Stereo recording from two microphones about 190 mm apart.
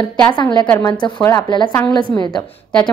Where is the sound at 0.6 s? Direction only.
10° left (ahead or behind).